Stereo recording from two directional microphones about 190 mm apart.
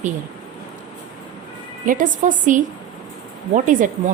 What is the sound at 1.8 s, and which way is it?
A woman's voice, 45° right (ahead or behind).